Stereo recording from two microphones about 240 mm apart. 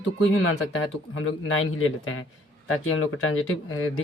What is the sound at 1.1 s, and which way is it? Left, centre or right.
Speech, left.